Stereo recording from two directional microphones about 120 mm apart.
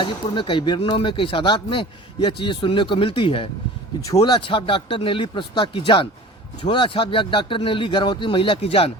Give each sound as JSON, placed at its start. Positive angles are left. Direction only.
{"t": 0.0, "sound": "speech", "side_deg": 45}